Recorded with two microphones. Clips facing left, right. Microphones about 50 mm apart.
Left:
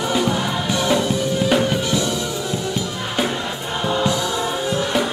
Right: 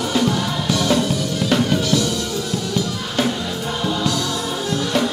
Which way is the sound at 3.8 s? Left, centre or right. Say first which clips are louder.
Left 3 dB; left.